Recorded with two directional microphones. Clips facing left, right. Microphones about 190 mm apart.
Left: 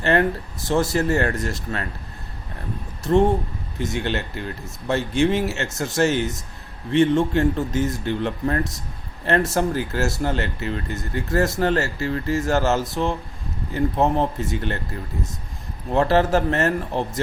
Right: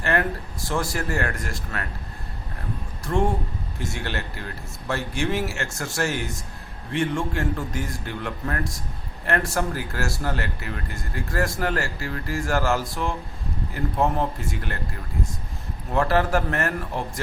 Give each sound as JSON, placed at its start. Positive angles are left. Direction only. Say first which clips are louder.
{"t": 0.0, "sound": "speech", "louder": "left 5 dB", "side_deg": 25}
{"t": 3.0, "sound": "speech", "louder": "left 6 dB", "side_deg": 25}
{"t": 15.9, "sound": "speech", "louder": "left 3 dB", "side_deg": 25}